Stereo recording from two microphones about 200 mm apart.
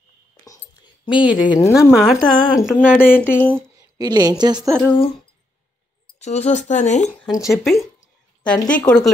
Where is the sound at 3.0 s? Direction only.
10° left (ahead or behind).